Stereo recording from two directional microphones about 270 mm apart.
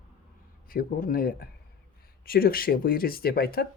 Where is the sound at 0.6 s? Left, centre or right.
Left.